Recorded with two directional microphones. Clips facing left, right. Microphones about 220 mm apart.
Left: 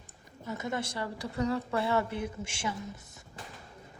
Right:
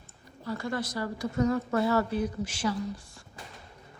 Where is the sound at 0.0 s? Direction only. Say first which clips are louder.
Right 3 dB; 20° left (ahead or behind).